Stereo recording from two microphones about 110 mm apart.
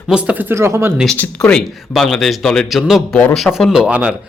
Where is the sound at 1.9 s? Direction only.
5° left (ahead or behind).